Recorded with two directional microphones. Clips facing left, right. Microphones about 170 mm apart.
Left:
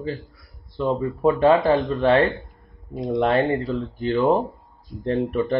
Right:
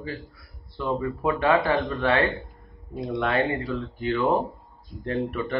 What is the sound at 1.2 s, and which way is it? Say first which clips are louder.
Speech: left 6 dB; 35° left (ahead or behind).